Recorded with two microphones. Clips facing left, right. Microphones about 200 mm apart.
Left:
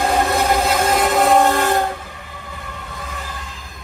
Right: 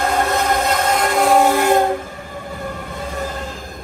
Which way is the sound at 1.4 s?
15° right (ahead or behind).